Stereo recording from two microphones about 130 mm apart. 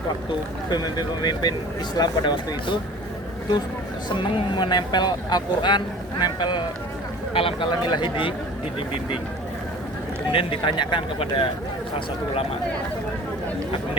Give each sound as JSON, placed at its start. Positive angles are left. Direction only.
{"t": 0.7, "sound": "speech", "side_deg": 30}
{"t": 4.1, "sound": "speech", "side_deg": 35}
{"t": 10.3, "sound": "speech", "side_deg": 40}